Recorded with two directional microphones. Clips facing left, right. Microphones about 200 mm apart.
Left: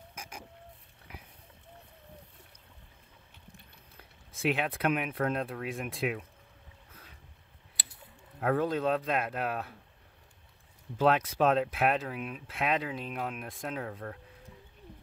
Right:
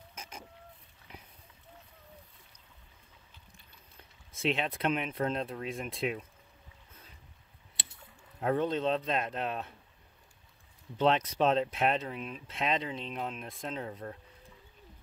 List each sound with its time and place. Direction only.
0.1 s vehicle: 10° left (ahead or behind)
4.4 s speech: 5° left (ahead or behind)
7.8 s a sound: 25° right (ahead or behind)
8.4 s speech: 5° left (ahead or behind)
11.0 s speech: 5° left (ahead or behind)
13.8 s speech: 5° right (ahead or behind)